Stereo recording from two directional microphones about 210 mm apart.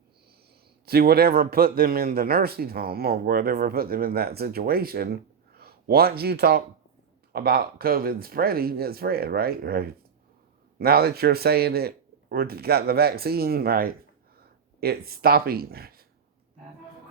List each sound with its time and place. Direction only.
0.9 s a man's voice: 45° right (ahead or behind)